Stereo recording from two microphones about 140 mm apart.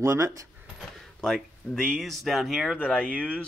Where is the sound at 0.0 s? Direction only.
20° right (ahead or behind).